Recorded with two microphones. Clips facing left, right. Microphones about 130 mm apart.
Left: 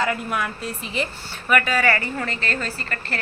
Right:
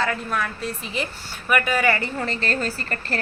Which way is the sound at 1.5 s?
10° right (ahead or behind).